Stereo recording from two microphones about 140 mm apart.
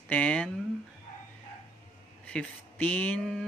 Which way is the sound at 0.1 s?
10° left (ahead or behind).